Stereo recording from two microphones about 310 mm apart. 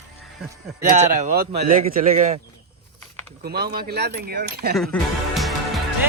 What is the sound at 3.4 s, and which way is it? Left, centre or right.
Speech, right.